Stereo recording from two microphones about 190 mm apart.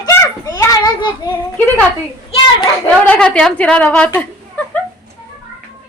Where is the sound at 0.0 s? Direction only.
20° left (ahead or behind).